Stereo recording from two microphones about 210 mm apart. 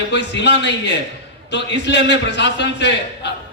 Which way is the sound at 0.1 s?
55° left (ahead or behind).